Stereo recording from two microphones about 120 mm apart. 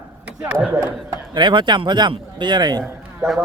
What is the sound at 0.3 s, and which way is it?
Speech, 10° right (ahead or behind).